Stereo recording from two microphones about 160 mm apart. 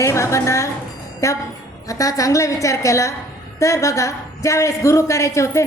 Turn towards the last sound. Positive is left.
turn(degrees=20)  # may be behind; listen again after turning